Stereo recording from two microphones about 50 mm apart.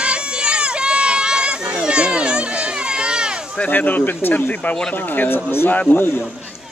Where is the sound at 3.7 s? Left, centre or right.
Left.